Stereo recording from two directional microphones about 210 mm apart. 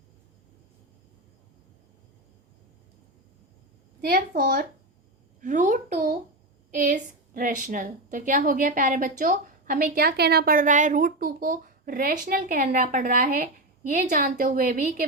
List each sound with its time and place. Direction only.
4.0 s a woman's voice: 45° right (ahead or behind)